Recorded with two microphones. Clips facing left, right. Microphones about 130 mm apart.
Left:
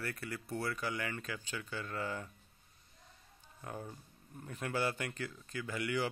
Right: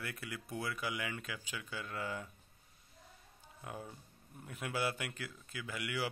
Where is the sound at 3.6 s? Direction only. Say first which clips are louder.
Left 2 dB; 10° right (ahead or behind).